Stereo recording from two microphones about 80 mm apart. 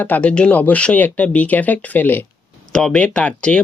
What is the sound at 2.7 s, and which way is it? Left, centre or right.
Speech, centre.